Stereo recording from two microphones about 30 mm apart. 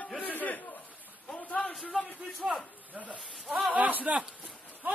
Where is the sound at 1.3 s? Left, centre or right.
Left.